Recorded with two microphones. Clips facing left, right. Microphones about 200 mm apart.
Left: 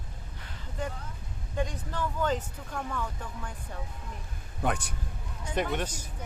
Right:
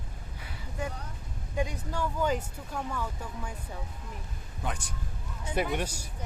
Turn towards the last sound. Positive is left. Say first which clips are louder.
# even
turn(degrees=-10)  # may be behind; listen again after turning